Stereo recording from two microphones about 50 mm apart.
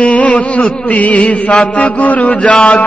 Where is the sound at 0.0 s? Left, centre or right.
Left.